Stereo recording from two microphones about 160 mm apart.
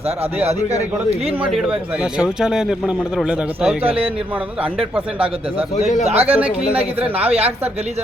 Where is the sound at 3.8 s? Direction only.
35° right (ahead or behind).